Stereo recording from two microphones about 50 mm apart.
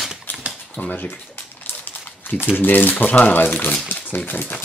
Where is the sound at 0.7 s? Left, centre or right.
Left.